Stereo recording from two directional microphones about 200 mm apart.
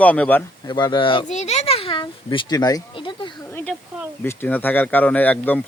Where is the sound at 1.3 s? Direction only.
35° left (ahead or behind).